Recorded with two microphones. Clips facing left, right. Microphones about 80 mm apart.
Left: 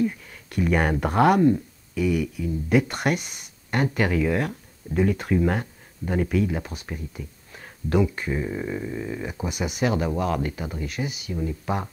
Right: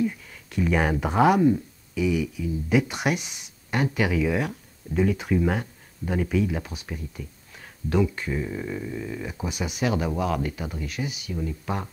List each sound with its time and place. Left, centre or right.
0.0 s speech: centre
8.3 s a sound: centre
9.3 s speech: centre